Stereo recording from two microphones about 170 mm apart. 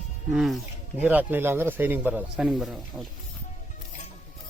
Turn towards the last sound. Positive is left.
turn(degrees=0)  # may be behind; listen again after turning